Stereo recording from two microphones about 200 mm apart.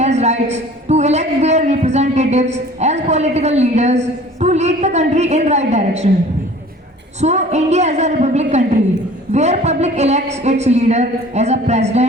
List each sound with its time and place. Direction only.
0.0 s a man's voice: 35° right (ahead or behind)
7.2 s a man's voice: 35° right (ahead or behind)